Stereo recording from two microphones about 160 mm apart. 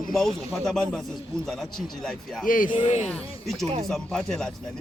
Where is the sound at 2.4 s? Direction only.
55° left (ahead or behind).